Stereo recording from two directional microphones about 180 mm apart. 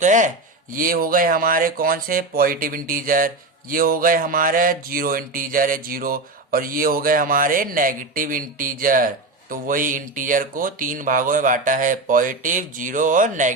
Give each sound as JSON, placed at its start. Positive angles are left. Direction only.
{"t": 0.0, "sound": "speech", "side_deg": -45}